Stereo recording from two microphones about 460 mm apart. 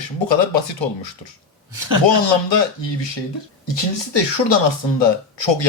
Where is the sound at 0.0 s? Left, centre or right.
Left.